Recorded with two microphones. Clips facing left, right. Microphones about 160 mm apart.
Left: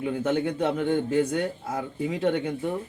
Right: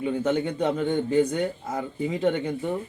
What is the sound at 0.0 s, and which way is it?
A man's voice, 5° left (ahead or behind).